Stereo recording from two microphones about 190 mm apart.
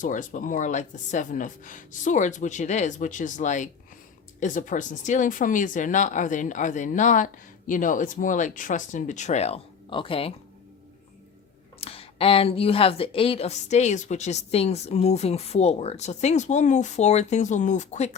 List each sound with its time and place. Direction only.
0.0 s a woman's voice: 45° left (ahead or behind)
11.8 s a woman's voice: 30° left (ahead or behind)